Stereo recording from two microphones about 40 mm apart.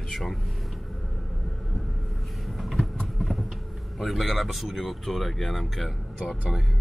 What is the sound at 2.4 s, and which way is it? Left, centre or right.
Vehicle, centre.